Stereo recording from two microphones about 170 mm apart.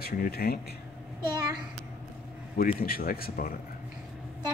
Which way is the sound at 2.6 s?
60° left (ahead or behind).